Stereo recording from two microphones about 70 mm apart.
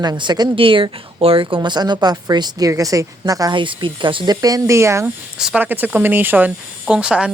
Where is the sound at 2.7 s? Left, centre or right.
Right.